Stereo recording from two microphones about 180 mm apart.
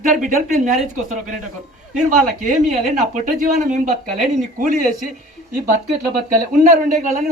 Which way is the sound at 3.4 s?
45° right (ahead or behind).